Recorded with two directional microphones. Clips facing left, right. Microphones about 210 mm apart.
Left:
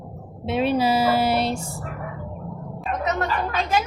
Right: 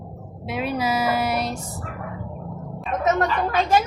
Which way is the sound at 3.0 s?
45° right (ahead or behind).